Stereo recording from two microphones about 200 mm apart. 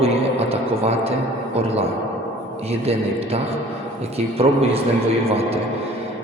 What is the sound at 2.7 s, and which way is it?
A man's voice, 30° right (ahead or behind).